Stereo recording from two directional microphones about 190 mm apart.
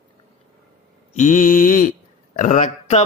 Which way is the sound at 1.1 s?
40° left (ahead or behind).